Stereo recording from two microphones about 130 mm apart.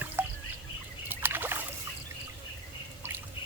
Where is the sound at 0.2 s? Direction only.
15° right (ahead or behind).